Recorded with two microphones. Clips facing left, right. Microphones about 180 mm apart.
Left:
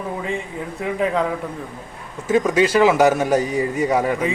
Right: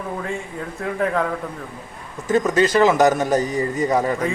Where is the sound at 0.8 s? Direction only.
15° left (ahead or behind).